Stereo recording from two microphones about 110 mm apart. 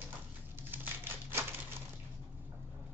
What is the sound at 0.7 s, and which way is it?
Typewriter, 20° right (ahead or behind).